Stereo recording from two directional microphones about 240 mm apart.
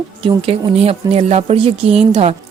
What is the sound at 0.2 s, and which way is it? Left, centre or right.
A woman's voice, right.